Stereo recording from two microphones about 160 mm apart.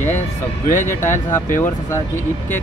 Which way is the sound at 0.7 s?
50° left (ahead or behind).